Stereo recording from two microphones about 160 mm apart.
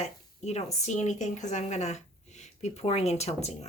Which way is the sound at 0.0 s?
45° left (ahead or behind).